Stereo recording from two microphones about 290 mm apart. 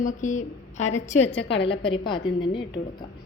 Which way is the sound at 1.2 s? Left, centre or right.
Left.